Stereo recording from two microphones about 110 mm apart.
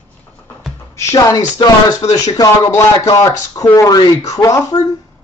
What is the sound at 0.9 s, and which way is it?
Speech, 35° left (ahead or behind).